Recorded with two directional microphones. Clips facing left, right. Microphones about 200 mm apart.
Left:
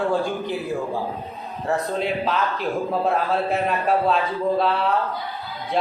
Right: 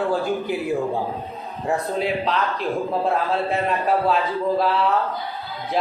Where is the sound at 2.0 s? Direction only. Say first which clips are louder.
Right 1 dB; centre (ahead or behind).